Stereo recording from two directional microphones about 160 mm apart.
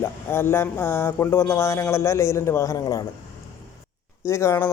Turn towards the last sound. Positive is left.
turn(degrees=15)  # may be behind; listen again after turning